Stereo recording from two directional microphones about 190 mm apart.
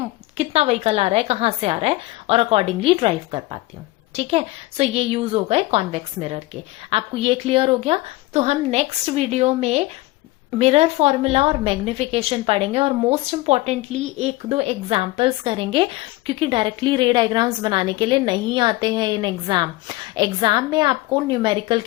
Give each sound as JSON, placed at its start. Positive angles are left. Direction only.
{"t": 0.0, "sound": "a woman's voice", "side_deg": -35}